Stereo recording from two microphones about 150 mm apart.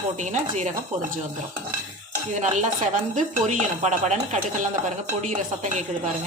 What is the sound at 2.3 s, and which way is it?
Dishes, 55° right (ahead or behind).